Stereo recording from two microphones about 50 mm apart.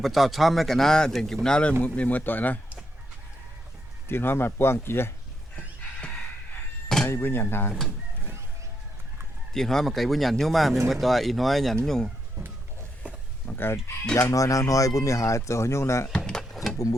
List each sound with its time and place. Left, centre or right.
0.0 s speech: centre
1.8 s speech: left
4.1 s speech: left
6.8 s a sound: centre
7.1 s speech: left
9.5 s speech: centre
12.4 s a sound: right
13.4 s chicken: left
14.2 s speech: left
16.1 s drawer open or close: centre